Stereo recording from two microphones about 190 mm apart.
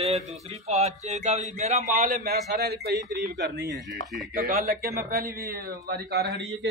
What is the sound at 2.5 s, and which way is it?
A man's voice, 55° right (ahead or behind).